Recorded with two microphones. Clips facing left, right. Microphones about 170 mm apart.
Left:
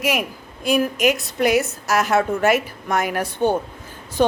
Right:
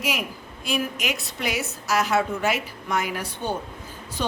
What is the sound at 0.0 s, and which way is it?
A woman's voice, 50° left (ahead or behind).